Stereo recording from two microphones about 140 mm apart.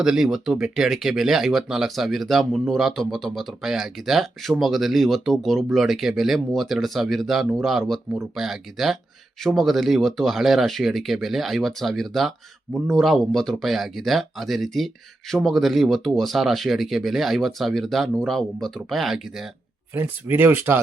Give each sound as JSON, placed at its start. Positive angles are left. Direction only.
{"t": 0.0, "sound": "speech", "side_deg": -5}
{"t": 19.9, "sound": "speech", "side_deg": -15}